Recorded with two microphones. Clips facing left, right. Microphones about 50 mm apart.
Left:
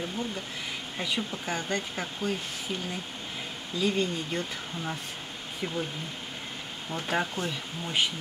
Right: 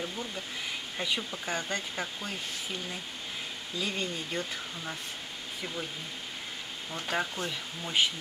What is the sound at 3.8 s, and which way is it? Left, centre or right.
Speech, centre.